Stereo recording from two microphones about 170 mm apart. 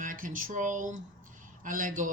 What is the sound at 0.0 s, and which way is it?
A man's voice, 50° right (ahead or behind).